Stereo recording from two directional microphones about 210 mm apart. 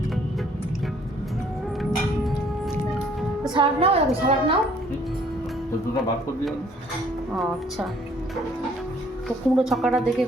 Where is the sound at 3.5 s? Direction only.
25° right (ahead or behind).